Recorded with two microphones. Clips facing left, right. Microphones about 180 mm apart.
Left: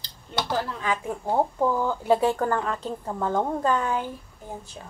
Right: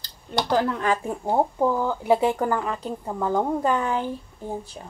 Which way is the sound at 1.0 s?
15° right (ahead or behind).